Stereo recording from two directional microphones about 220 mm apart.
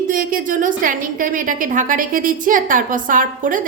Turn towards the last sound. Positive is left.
turn(degrees=-40)  # may be behind; listen again after turning